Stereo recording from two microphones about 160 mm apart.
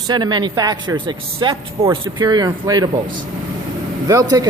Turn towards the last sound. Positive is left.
turn(degrees=-20)  # may be behind; listen again after turning